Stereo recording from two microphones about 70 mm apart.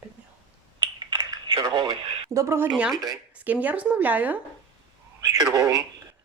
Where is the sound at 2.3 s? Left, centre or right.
Right.